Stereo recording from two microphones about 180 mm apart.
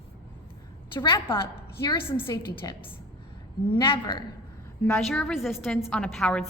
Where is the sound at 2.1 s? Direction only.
10° left (ahead or behind).